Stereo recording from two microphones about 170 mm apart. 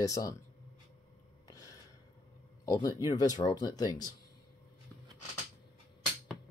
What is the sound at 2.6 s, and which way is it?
Speech, 20° left (ahead or behind).